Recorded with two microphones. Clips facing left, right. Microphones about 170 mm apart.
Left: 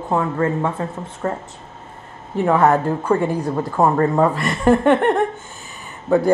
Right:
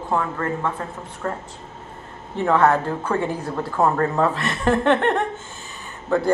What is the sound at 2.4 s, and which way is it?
Speech, 15° left (ahead or behind).